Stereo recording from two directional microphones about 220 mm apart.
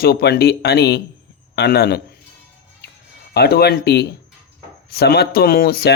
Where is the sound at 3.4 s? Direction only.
45° left (ahead or behind).